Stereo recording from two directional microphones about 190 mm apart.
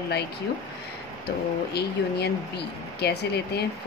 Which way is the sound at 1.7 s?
60° left (ahead or behind).